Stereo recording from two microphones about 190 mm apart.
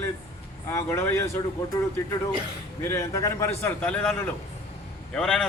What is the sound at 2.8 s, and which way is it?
A man's voice, 15° left (ahead or behind).